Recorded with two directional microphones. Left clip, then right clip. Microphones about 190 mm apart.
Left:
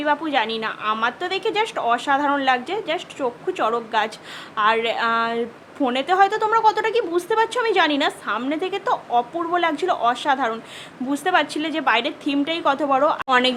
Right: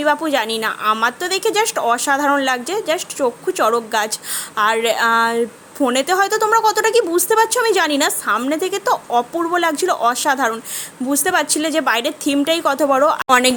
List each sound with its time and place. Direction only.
0.0 s a woman's voice: 25° right (ahead or behind)